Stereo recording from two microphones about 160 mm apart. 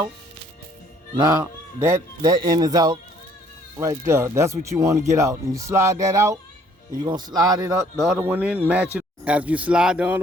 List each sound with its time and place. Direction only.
1.1 s speech: 25° right (ahead or behind)
7.9 s speech: centre (ahead or behind)
8.2 s speech: 10° right (ahead or behind)